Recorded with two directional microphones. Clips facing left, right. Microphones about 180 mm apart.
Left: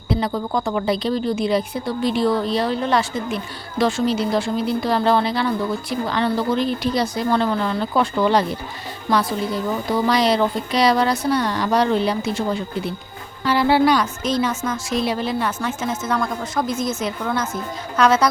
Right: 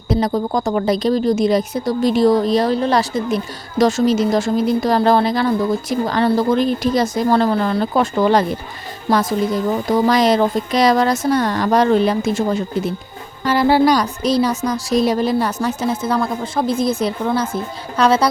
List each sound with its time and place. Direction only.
0.1 s a woman's voice: 40° right (ahead or behind)